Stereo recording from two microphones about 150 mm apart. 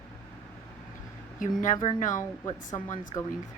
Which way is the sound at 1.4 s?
60° left (ahead or behind).